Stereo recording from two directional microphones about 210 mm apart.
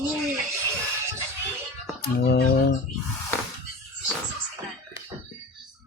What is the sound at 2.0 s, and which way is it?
Speech, 50° left (ahead or behind).